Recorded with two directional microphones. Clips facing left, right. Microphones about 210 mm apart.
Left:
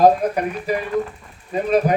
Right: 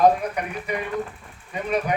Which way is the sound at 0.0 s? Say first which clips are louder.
Left 4 dB; 35° left (ahead or behind).